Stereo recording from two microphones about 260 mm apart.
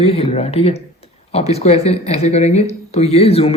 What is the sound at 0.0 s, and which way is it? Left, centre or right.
Speech, left.